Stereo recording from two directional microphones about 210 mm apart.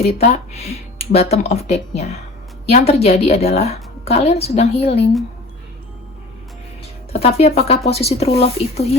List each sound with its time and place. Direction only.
0.1 s a woman's voice: 30° left (ahead or behind)
7.1 s a woman's voice: 30° left (ahead or behind)